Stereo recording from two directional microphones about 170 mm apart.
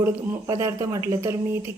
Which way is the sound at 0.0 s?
15° right (ahead or behind).